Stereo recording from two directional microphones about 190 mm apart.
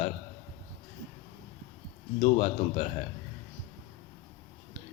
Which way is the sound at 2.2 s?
35° left (ahead or behind).